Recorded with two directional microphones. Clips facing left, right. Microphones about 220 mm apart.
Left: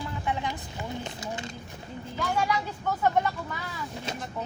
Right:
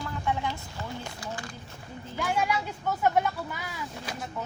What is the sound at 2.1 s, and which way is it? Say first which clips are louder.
Speech: even; 10° right (ahead or behind).